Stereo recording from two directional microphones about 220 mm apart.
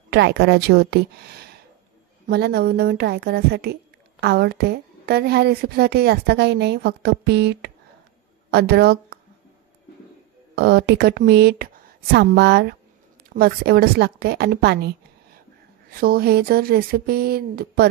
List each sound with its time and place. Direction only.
0.1 s a woman's voice: 50° right (ahead or behind)
10.5 s a woman's voice: 50° right (ahead or behind)